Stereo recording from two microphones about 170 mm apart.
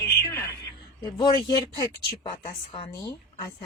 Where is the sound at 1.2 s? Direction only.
25° left (ahead or behind).